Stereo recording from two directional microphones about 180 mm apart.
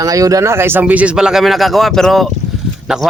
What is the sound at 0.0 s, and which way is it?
Speech, 20° right (ahead or behind).